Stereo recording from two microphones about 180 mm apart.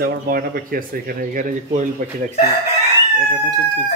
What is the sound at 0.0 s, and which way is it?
Speech, 55° right (ahead or behind).